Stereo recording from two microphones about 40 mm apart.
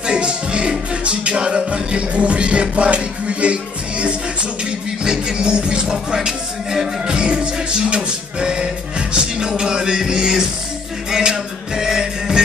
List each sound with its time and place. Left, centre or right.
0.0 s music: right